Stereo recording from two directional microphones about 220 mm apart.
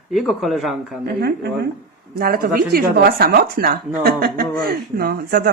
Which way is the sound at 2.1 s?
45° right (ahead or behind).